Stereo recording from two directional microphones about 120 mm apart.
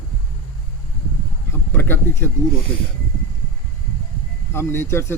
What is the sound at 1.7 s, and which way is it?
Speech, 20° left (ahead or behind).